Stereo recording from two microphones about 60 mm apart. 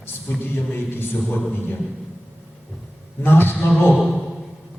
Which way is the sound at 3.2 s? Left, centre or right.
Left.